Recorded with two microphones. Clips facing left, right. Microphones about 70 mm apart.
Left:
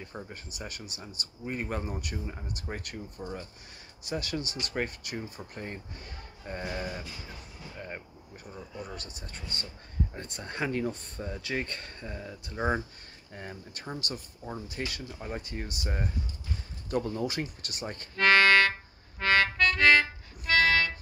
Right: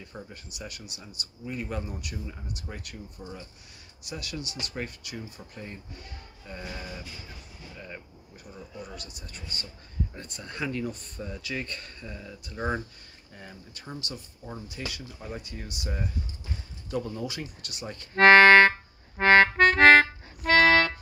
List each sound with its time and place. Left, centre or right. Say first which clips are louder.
0.3 s speech: left 1 dB; left
3.2 s speech: left 4 dB; left
8.9 s speech: left 1 dB; left
13.3 s speech: left 4 dB; left
18.1 s music: right 7 dB; right